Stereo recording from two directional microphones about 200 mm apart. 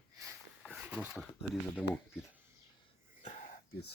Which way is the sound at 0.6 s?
5° right (ahead or behind).